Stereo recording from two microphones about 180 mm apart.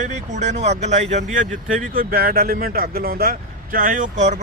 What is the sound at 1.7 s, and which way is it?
Speech, 55° right (ahead or behind).